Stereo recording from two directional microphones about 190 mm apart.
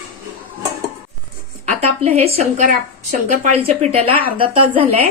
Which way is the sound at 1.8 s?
35° right (ahead or behind).